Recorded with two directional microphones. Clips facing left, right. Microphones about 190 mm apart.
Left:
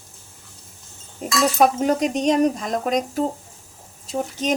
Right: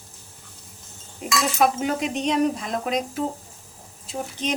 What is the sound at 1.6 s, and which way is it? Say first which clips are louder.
Speech: left 4 dB; 40° left (ahead or behind).